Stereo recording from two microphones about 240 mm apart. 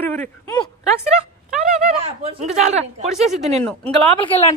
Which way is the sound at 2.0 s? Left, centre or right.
Right.